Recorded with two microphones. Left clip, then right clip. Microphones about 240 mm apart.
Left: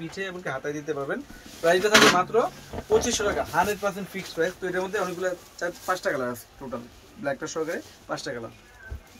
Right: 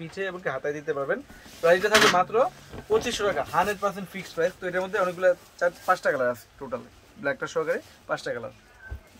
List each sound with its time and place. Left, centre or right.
0.1 s speech: centre